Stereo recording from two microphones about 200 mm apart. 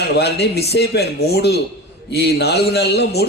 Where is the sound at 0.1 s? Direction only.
55° left (ahead or behind).